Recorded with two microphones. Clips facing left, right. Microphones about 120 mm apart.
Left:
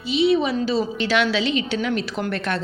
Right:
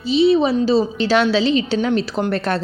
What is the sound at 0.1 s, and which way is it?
A woman's voice, 35° right (ahead or behind).